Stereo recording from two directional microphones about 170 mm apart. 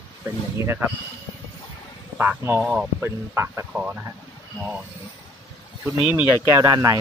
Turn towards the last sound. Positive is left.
turn(degrees=-20)  # may be behind; listen again after turning